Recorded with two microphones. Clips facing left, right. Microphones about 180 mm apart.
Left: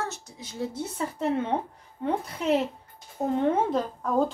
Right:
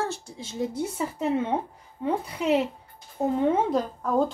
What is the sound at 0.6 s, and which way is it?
A woman's voice, 10° right (ahead or behind).